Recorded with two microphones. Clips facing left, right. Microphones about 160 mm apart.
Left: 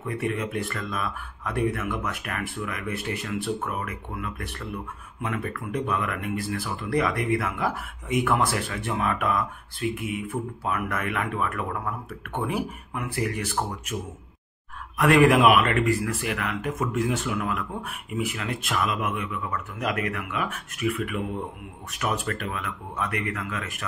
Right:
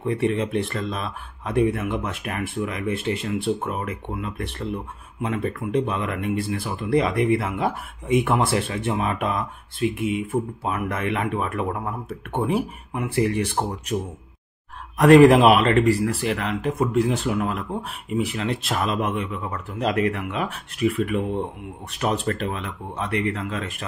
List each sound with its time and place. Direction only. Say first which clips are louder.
0.0 s speech: right 6 dB; 30° right (ahead or behind)
15.0 s speech: right 6 dB; 35° right (ahead or behind)